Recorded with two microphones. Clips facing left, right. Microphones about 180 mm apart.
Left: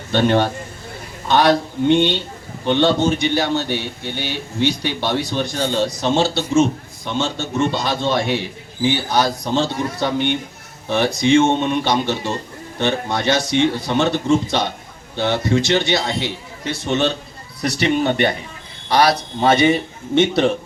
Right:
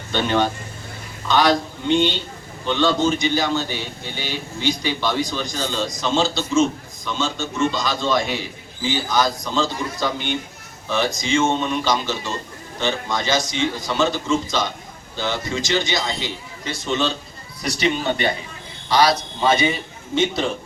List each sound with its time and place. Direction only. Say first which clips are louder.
0.1 s a man's voice: left 4 dB; 60° left (ahead or behind)